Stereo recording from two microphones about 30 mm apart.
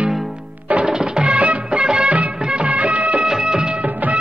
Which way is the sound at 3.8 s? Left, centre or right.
Right.